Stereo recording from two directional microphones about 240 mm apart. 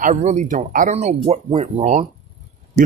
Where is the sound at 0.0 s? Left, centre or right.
Right.